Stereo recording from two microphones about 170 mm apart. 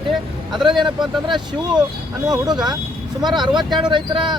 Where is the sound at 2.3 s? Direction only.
25° right (ahead or behind).